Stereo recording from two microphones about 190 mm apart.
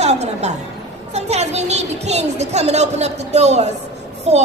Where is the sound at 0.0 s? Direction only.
35° right (ahead or behind).